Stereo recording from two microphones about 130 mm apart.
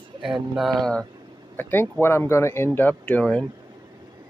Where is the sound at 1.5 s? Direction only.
15° left (ahead or behind).